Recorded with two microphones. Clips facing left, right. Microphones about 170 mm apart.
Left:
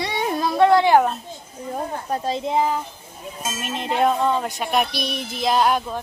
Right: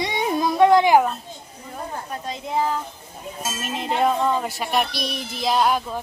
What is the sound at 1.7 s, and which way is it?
Speech, 35° left (ahead or behind).